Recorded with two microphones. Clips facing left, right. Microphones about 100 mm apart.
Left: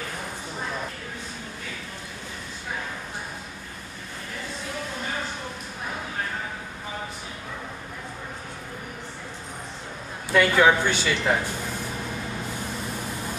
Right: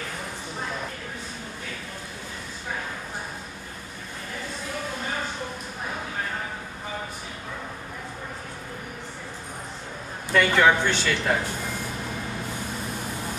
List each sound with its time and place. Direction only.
10.3 s speech: 5° left (ahead or behind)